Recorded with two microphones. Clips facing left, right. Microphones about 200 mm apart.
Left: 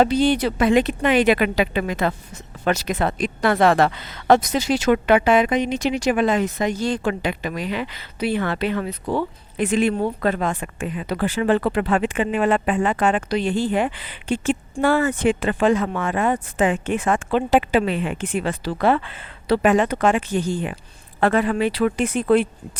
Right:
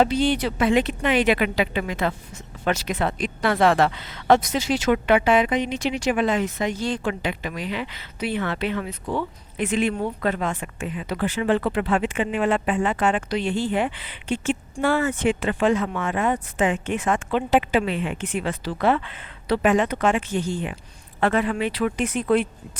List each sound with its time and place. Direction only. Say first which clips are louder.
0.0 s speech: left 3 dB; 40° left (ahead or behind)
13.3 s speech: left 3 dB; 40° left (ahead or behind)